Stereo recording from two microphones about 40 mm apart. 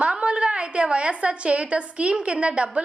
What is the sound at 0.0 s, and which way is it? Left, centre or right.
A woman's voice, right.